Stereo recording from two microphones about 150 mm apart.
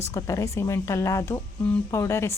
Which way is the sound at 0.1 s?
20° left (ahead or behind).